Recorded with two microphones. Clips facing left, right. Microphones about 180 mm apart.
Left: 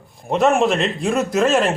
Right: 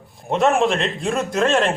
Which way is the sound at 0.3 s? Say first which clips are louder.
Left 1 dB; centre (ahead or behind).